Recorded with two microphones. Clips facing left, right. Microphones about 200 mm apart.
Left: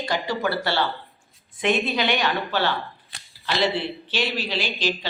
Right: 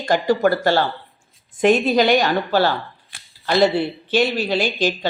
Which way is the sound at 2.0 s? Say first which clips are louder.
Right 7 dB; 40° right (ahead or behind).